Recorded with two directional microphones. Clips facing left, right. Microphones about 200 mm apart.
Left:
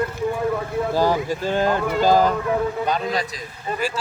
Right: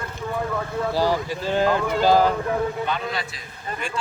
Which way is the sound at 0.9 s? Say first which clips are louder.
Left 2 dB; 45° left (ahead or behind).